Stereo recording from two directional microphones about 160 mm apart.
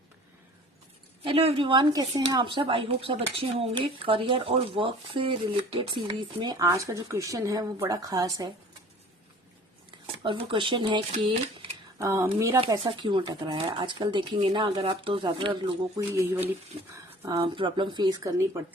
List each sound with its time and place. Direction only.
1.2 s speech: 35° right (ahead or behind)
10.2 s speech: 30° right (ahead or behind)
11.9 s speech: 20° right (ahead or behind)
12.5 s speech: 30° right (ahead or behind)
16.0 s speech: 15° right (ahead or behind)
16.9 s speech: 30° right (ahead or behind)